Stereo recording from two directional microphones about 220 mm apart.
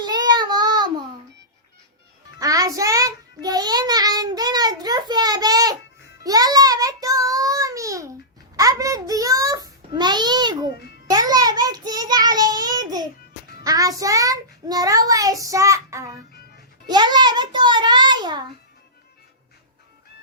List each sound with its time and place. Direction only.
0.0 s child singing: 20° right (ahead or behind)
2.4 s child singing: 15° right (ahead or behind)
8.5 s babbling: 15° right (ahead or behind)
11.1 s child singing: 15° right (ahead or behind)
16.9 s a sound: 20° right (ahead or behind)